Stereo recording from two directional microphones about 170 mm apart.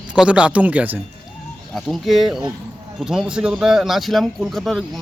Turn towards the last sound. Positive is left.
turn(degrees=0)  # may be behind; listen again after turning